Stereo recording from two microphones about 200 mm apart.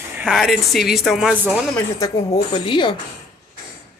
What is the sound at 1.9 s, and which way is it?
Speech, 20° left (ahead or behind).